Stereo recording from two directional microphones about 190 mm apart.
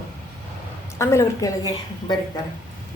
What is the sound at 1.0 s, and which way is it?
Speech, 15° left (ahead or behind).